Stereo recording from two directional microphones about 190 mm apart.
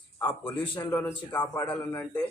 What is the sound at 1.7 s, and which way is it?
Speech, 10° left (ahead or behind).